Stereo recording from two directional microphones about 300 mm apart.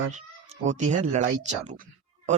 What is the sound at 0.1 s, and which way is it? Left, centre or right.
Speech, right.